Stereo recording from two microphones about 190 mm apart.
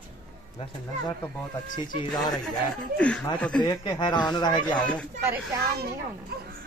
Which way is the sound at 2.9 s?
5° left (ahead or behind).